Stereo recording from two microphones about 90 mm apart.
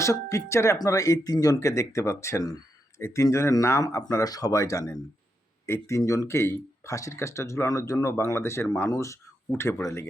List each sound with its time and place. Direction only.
0.0 s speech: 35° left (ahead or behind)